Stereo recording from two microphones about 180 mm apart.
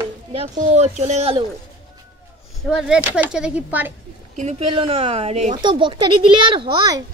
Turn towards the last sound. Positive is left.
turn(degrees=-25)  # may be behind; listen again after turning